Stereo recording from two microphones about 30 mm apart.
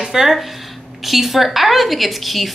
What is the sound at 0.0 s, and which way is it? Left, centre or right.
A woman's voice, centre.